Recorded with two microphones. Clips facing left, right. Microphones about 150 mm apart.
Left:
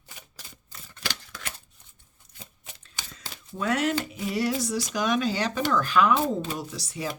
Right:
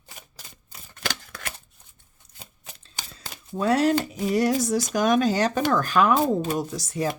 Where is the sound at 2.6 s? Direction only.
35° right (ahead or behind).